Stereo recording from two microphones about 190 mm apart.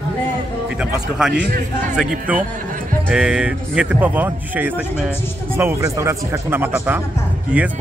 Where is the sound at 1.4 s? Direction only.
45° right (ahead or behind).